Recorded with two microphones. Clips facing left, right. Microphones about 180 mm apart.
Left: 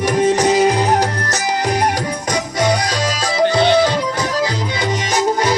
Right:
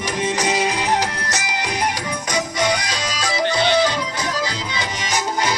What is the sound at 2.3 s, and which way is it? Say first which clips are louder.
Music: left 3 dB; 35° left (ahead or behind).